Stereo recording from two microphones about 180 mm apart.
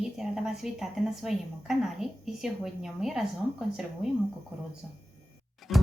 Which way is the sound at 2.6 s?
Centre (ahead or behind).